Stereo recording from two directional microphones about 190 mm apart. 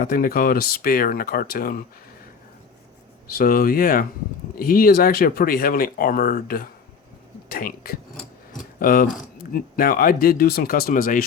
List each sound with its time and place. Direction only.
0.0 s speech: 50° left (ahead or behind)
3.3 s speech: 50° left (ahead or behind)